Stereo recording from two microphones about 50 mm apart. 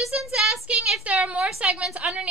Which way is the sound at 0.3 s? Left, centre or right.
Centre.